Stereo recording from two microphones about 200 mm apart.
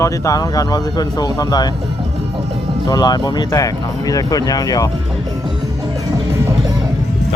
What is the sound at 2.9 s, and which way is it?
Speech, 20° left (ahead or behind).